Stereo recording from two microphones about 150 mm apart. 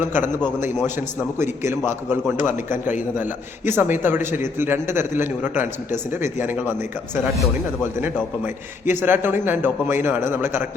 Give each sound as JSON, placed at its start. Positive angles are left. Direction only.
{"t": 3.7, "sound": "a man's voice", "side_deg": -15}
{"t": 8.9, "sound": "a man's voice", "side_deg": -15}